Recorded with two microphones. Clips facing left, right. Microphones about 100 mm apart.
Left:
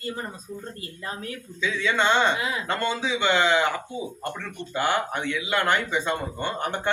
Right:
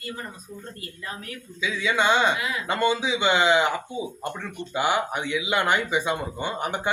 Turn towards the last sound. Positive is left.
turn(degrees=-10)  # may be behind; listen again after turning